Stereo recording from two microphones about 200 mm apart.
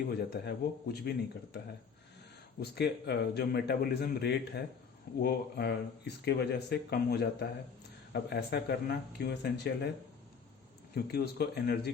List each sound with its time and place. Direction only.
0.1 s speech: 55° left (ahead or behind)
2.6 s a man's voice: 55° left (ahead or behind)
10.9 s speech: 50° left (ahead or behind)